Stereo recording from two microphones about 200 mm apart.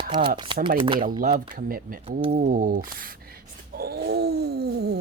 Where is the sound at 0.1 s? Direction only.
25° right (ahead or behind).